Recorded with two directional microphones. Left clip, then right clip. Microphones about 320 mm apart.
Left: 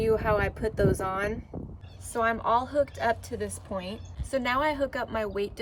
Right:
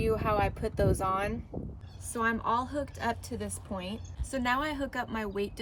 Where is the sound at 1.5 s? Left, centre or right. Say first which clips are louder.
Even; left.